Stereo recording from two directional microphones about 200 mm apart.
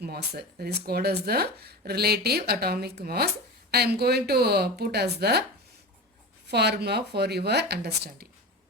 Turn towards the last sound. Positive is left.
turn(degrees=-55)  # may be behind; listen again after turning